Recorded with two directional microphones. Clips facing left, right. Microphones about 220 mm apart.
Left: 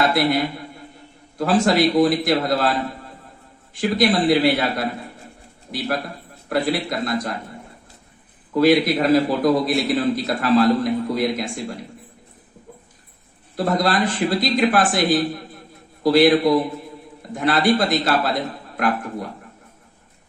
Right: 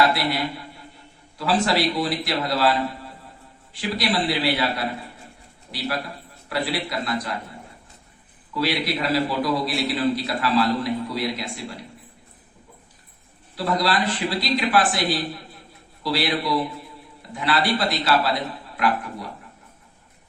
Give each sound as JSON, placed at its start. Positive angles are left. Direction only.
{"t": 0.0, "sound": "a man's voice", "side_deg": 50}
{"t": 1.4, "sound": "a man's voice", "side_deg": 45}
{"t": 3.8, "sound": "a man's voice", "side_deg": 45}
{"t": 6.5, "sound": "a man's voice", "side_deg": 50}
{"t": 8.5, "sound": "a man's voice", "side_deg": 50}
{"t": 13.6, "sound": "a man's voice", "side_deg": 45}